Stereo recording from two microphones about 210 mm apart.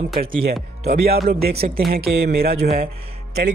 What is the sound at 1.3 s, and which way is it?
Speech, 50° right (ahead or behind).